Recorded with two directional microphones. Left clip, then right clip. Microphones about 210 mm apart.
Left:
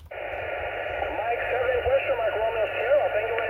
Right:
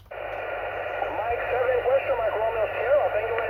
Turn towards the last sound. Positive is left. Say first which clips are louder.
# even
turn(degrees=10)  # may be behind; listen again after turning